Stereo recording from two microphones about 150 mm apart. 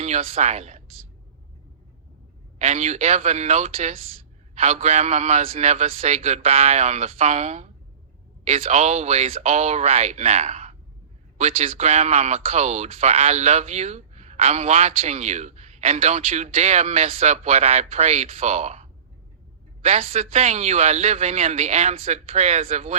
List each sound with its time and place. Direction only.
0.0 s speech: 45° right (ahead or behind)
2.6 s speech: 45° right (ahead or behind)